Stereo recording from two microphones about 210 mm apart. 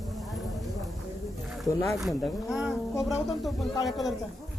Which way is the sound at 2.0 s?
Centre (ahead or behind).